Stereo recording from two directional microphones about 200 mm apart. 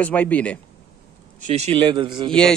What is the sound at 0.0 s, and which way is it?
Speech, 5° left (ahead or behind).